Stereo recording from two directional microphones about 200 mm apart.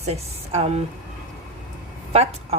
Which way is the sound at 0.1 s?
30° right (ahead or behind).